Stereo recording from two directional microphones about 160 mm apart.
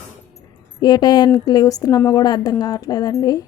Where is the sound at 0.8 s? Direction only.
25° left (ahead or behind).